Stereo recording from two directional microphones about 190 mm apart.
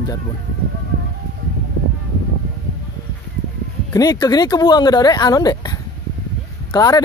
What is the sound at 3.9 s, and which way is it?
Speech, 20° left (ahead or behind).